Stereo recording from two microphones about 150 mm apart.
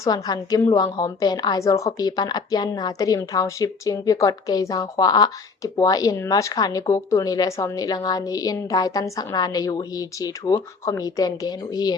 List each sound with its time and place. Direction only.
0.0 s a woman's voice: 25° left (ahead or behind)